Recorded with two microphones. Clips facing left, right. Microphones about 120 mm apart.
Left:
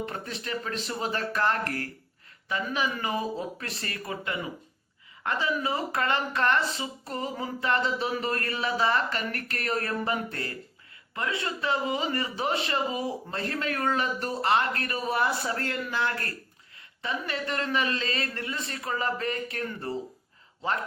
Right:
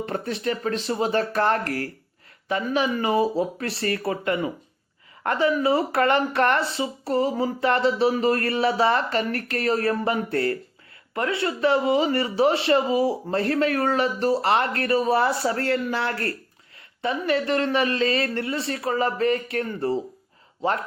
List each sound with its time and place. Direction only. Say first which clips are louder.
0.4 s speech: right 7 dB; 35° right (ahead or behind)
5.6 s speech: right 8 dB; 30° right (ahead or behind)